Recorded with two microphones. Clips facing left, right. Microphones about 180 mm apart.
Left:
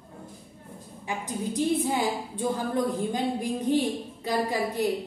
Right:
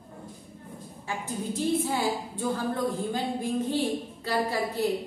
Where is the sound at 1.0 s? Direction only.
15° left (ahead or behind).